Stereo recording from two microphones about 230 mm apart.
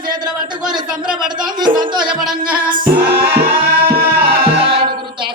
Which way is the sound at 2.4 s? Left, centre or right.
Right.